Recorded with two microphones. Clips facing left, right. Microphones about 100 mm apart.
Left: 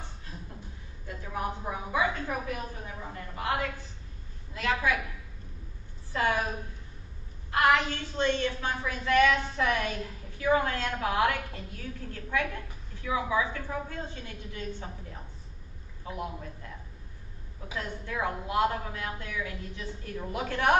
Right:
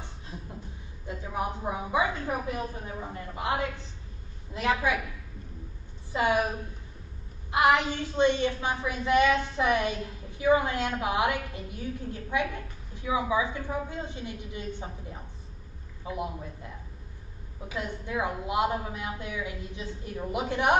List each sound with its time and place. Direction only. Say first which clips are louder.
1.0 s a woman's voice: right 2 dB; 20° right (ahead or behind)
4.6 s a woman's voice: right 2 dB; 20° right (ahead or behind)
6.1 s a woman's voice: right 3 dB; 15° right (ahead or behind)
7.5 s a woman's voice: right 1 dB; 15° right (ahead or behind)
17.7 s a woman's voice: right 2 dB; 15° right (ahead or behind)